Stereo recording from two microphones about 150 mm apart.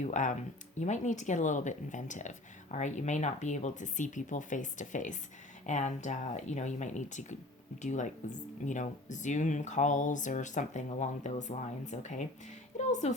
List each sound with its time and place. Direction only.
0.0 s a woman's voice: 55° left (ahead or behind)